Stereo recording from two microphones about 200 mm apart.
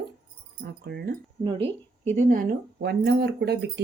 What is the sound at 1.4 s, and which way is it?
A woman's voice, 30° right (ahead or behind).